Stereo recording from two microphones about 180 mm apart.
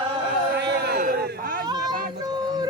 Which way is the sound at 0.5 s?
60° right (ahead or behind).